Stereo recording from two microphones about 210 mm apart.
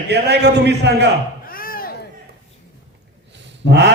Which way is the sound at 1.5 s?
45° left (ahead or behind).